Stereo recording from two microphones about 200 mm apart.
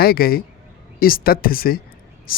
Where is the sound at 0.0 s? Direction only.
50° left (ahead or behind).